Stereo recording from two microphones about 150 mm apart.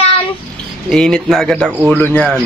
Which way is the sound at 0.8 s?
5° left (ahead or behind).